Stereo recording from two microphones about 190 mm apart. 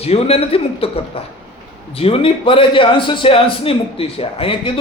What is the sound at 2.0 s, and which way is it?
A man's voice, 30° left (ahead or behind).